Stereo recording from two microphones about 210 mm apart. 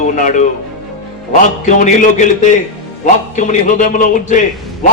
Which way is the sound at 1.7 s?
35° left (ahead or behind).